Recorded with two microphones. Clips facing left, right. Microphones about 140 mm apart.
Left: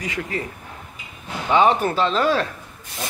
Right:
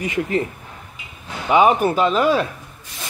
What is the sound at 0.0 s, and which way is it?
Speech, 20° right (ahead or behind).